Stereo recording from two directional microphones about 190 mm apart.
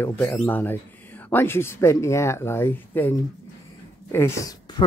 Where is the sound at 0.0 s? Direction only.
10° left (ahead or behind).